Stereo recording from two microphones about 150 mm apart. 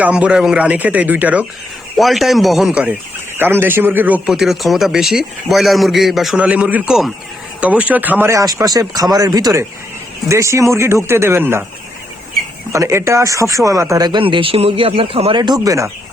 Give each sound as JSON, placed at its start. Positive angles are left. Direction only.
{"t": 0.0, "sound": "speech", "side_deg": -10}
{"t": 8.3, "sound": "speech", "side_deg": -20}
{"t": 12.7, "sound": "speech", "side_deg": -20}